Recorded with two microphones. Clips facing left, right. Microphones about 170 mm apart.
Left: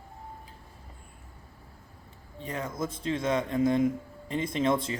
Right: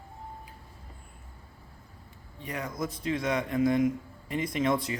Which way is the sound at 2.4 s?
25° left (ahead or behind).